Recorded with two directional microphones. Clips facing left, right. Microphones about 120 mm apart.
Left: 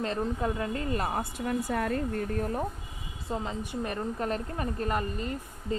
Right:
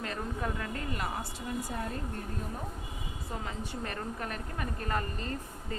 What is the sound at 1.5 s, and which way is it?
Speech, 80° left.